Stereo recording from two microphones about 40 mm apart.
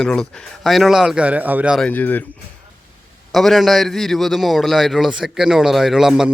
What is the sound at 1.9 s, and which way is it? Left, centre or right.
Speech, left.